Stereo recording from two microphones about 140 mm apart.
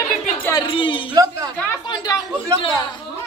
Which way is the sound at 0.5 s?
35° left (ahead or behind).